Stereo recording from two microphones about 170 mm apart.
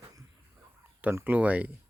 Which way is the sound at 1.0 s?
10° right (ahead or behind).